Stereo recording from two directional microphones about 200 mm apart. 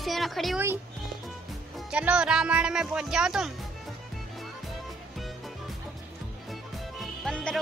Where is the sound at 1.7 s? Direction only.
5° right (ahead or behind).